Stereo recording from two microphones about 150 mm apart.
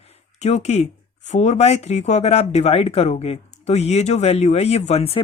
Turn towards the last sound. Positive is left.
turn(degrees=40)  # may be behind; listen again after turning